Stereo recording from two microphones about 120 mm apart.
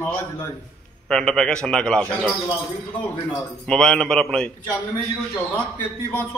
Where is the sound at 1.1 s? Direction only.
5° left (ahead or behind).